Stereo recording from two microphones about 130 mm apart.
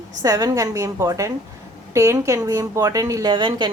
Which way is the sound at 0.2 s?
25° right (ahead or behind).